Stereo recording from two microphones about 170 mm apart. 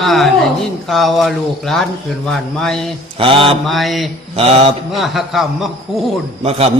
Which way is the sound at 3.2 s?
30° right (ahead or behind).